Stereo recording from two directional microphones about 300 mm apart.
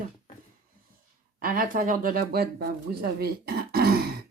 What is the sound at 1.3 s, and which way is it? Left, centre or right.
Speech, right.